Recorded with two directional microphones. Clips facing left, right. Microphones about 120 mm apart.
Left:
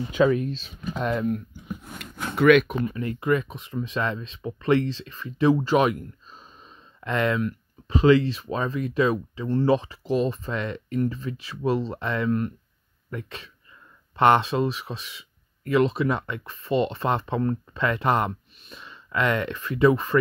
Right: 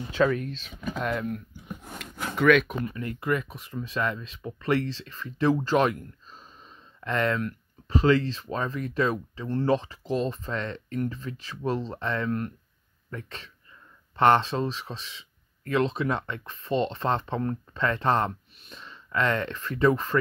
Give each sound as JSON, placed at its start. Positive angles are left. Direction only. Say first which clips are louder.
{"t": 0.1, "sound": "speech", "louder": "left 3 dB", "side_deg": 15}
{"t": 2.3, "sound": "speech", "louder": "left 4 dB", "side_deg": 5}
{"t": 3.0, "sound": "speech", "louder": "left 4 dB", "side_deg": 20}